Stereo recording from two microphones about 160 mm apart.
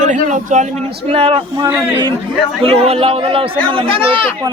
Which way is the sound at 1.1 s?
35° right (ahead or behind).